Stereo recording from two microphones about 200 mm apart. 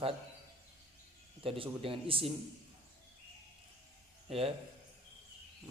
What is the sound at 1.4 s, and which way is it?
Speech, 25° right (ahead or behind).